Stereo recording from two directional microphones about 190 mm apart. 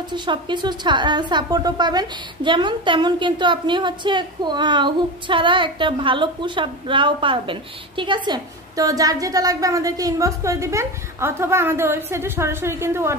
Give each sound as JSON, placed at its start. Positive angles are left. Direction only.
{"t": 0.1, "sound": "a woman's voice", "side_deg": -25}